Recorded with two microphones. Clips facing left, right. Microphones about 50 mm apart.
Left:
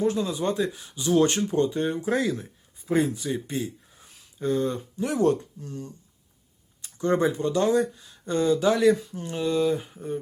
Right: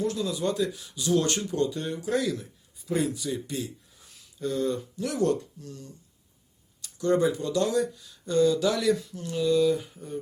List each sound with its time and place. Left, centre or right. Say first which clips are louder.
0.0 s speech: left 3 dB; left